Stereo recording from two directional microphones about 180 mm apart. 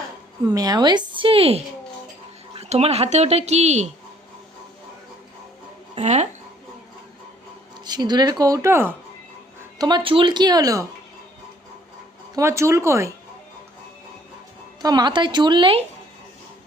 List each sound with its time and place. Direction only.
0.4 s a woman's voice: 20° right (ahead or behind); by 3.9 s 40° right (ahead or behind)
5.9 s speech: 40° right (ahead or behind)
7.9 s a woman's voice: 20° right (ahead or behind)
12.3 s speech: 15° right (ahead or behind)
14.8 s a woman's voice: 25° right (ahead or behind)